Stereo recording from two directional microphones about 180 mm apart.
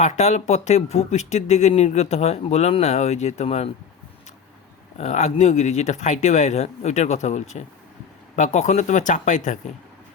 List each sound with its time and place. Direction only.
0.0 s speech: 40° left (ahead or behind)
4.9 s speech: 40° left (ahead or behind)